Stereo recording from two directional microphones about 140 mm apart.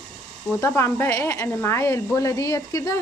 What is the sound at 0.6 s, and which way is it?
A woman's voice, 20° left (ahead or behind).